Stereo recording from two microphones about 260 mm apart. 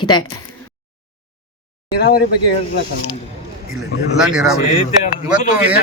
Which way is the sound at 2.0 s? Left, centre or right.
Left.